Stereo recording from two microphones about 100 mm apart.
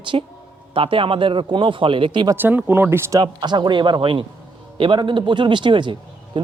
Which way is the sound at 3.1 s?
45° right (ahead or behind).